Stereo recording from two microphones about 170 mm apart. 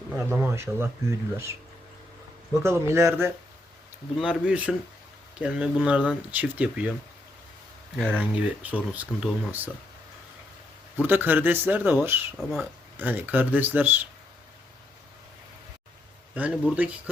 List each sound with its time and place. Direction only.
0.1 s speech: 10° right (ahead or behind)
2.6 s speech: 15° right (ahead or behind)
8.1 s speech: 10° right (ahead or behind)
11.0 s speech: 10° right (ahead or behind)
12.4 s speech: centre (ahead or behind)
13.0 s speech: 10° right (ahead or behind)
16.3 s speech: 10° right (ahead or behind)